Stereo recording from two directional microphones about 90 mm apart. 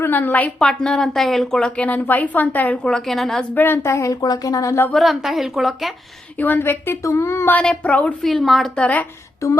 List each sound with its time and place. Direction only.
0.0 s a woman's voice: 20° left (ahead or behind)
0.6 s a woman's voice: 5° left (ahead or behind)
2.8 s a woman's voice: 5° left (ahead or behind)
3.5 s speech: 25° left (ahead or behind)
4.9 s a woman's voice: centre (ahead or behind)
6.3 s a woman's voice: 20° left (ahead or behind)
7.5 s a woman's voice: 15° left (ahead or behind)
8.2 s a woman's voice: centre (ahead or behind)